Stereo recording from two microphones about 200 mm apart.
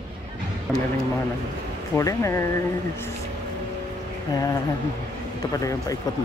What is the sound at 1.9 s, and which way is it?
Speech, 15° left (ahead or behind).